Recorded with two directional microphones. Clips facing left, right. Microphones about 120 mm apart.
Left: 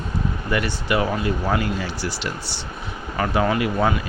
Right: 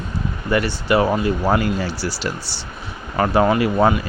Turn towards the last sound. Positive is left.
turn(degrees=-35)  # may be behind; listen again after turning